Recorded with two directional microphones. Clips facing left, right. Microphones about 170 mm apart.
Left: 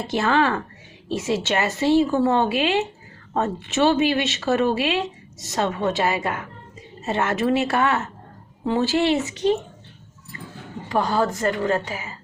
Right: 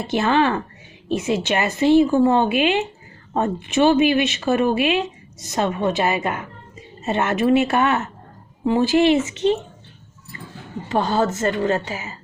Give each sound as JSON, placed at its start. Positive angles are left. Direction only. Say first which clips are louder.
{"t": 0.1, "sound": "a woman's voice", "louder": "right 2 dB", "side_deg": -20}
{"t": 10.8, "sound": "a woman's voice", "louder": "right 2 dB", "side_deg": -25}